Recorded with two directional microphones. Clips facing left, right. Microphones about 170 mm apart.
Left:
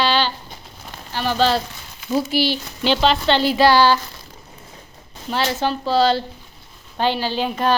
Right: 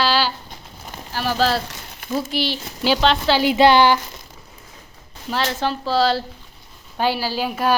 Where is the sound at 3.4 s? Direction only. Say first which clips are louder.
Right 2 dB; 20° right (ahead or behind).